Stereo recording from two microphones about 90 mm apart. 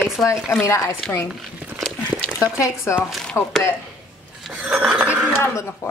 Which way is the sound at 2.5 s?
35° left (ahead or behind).